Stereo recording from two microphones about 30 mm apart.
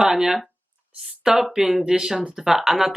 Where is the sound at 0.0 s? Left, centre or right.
Centre.